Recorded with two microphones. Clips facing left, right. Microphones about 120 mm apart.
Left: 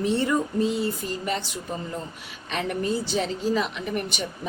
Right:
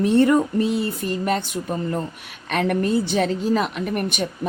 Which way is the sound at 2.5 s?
60° right (ahead or behind).